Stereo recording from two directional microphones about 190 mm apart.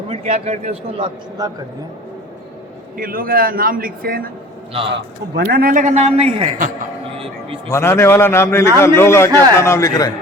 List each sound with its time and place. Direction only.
0.1 s a man's voice: 35° right (ahead or behind)
1.4 s speech: 20° right (ahead or behind)
3.0 s a man's voice: 50° right (ahead or behind)
4.9 s a man's voice: 65° right (ahead or behind); by 6.5 s 30° right (ahead or behind)
7.7 s a man's voice: 15° left (ahead or behind)